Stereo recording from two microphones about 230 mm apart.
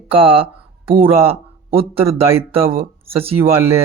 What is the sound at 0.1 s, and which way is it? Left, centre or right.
Speech, right.